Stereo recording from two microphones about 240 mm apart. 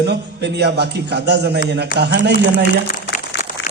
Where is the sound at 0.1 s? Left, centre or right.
Right.